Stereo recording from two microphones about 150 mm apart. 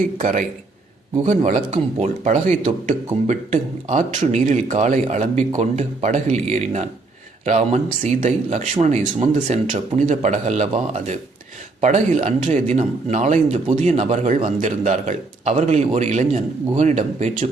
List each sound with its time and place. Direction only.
0.2 s speech: 60° right (ahead or behind)
1.1 s speech: 50° right (ahead or behind)